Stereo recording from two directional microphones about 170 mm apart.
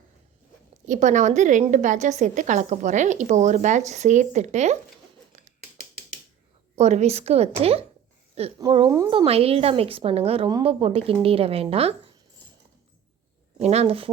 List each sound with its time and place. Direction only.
0.9 s a woman's voice: 45° right (ahead or behind)
6.7 s a woman's voice: 40° right (ahead or behind)
8.9 s a woman's voice: 25° right (ahead or behind)
13.6 s a woman's voice: 40° right (ahead or behind)